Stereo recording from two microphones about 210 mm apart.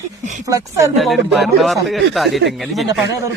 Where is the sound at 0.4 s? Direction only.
15° right (ahead or behind).